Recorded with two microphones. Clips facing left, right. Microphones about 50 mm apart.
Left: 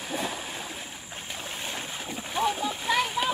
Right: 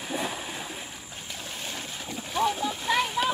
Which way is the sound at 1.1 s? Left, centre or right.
Left.